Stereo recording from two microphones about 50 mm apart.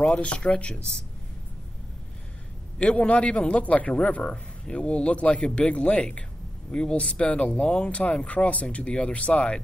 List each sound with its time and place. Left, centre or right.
0.0 s a man's voice: left
2.8 s a man's voice: left